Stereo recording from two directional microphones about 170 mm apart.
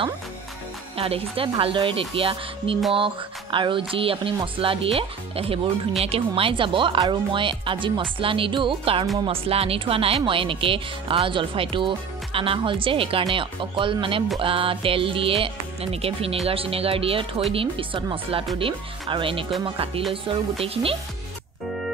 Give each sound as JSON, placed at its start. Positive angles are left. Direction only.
{"t": 0.9, "sound": "speech", "side_deg": -35}